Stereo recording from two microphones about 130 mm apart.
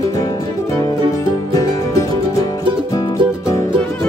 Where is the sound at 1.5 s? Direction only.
25° left (ahead or behind).